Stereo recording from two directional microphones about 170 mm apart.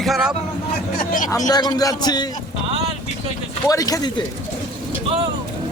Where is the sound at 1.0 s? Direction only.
55° left (ahead or behind).